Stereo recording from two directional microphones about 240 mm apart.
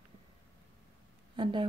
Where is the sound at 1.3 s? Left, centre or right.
Right.